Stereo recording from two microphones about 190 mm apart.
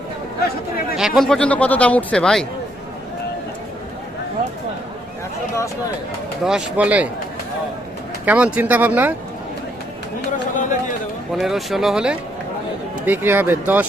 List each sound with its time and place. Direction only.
0.9 s speech: centre (ahead or behind)
6.4 s speech: 5° right (ahead or behind)
8.2 s speech: 10° right (ahead or behind)
10.3 s a sound: 40° left (ahead or behind)
11.3 s speech: centre (ahead or behind)